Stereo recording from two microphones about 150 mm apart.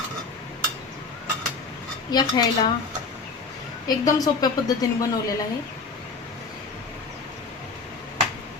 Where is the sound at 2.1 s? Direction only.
30° left (ahead or behind).